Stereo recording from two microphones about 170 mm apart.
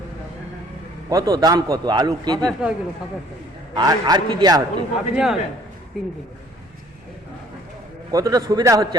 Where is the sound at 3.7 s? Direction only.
20° right (ahead or behind).